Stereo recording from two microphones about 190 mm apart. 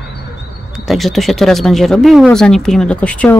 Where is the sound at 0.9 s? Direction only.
Centre (ahead or behind).